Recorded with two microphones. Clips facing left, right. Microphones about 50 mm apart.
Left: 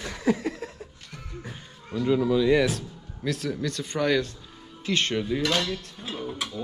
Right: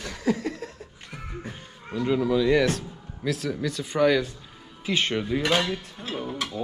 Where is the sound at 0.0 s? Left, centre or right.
Left.